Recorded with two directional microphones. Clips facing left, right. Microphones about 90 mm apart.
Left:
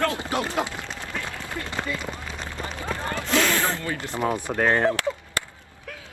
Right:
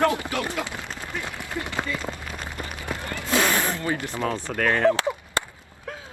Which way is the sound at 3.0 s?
25° left (ahead or behind).